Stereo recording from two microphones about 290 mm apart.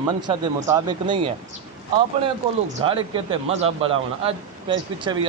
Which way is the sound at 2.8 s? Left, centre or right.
Centre.